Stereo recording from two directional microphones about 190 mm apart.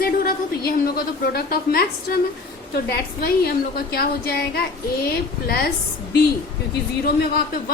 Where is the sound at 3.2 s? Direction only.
55° left (ahead or behind).